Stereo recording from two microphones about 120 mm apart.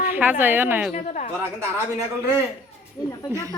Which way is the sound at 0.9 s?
85° left.